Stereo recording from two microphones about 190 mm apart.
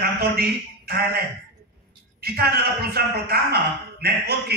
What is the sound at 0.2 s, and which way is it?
A man's voice, 55° right (ahead or behind).